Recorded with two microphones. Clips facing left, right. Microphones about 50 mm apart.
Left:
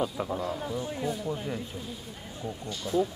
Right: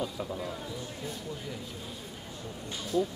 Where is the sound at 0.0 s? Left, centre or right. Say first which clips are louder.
Left 4 dB; left.